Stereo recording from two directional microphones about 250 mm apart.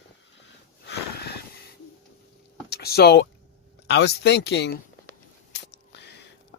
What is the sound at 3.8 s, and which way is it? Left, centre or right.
Speech, left.